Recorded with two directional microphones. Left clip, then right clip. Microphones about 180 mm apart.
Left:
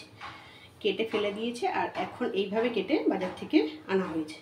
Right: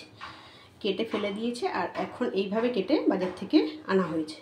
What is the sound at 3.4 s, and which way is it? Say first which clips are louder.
Speech: right 2 dB; 20° right (ahead or behind).